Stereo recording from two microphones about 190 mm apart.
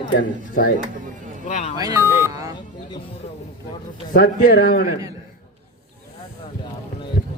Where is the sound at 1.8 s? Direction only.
15° right (ahead or behind).